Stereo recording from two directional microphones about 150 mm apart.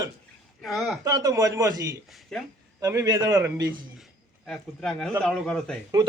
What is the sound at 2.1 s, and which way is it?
Speech, centre (ahead or behind).